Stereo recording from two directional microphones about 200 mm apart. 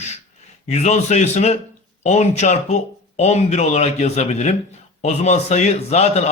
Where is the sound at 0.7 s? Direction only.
35° left (ahead or behind).